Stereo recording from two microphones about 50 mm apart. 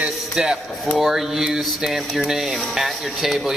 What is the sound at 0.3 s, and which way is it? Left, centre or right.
Speech, centre.